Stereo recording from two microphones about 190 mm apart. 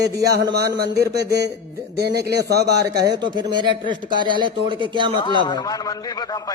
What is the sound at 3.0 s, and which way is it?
Speech, 20° right (ahead or behind).